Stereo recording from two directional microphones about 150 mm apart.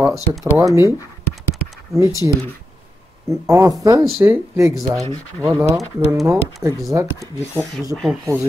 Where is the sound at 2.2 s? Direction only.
20° right (ahead or behind).